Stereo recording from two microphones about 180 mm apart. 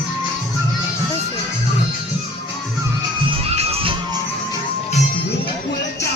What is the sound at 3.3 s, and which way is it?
Music, 35° right (ahead or behind).